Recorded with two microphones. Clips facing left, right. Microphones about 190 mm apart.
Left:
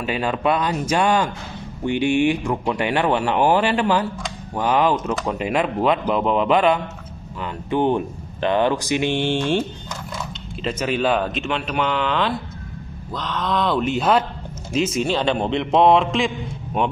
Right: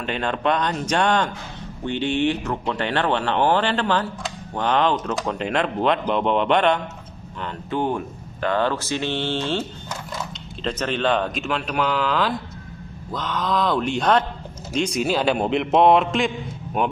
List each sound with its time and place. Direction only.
0.0 s speech: 5° left (ahead or behind)
7.4 s speech: 20° left (ahead or behind); by 16.9 s centre (ahead or behind)